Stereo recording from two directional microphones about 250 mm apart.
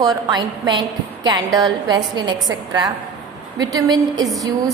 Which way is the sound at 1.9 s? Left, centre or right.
Centre.